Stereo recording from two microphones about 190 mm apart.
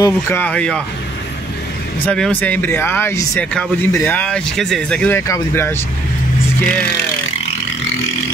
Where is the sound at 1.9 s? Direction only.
5° left (ahead or behind).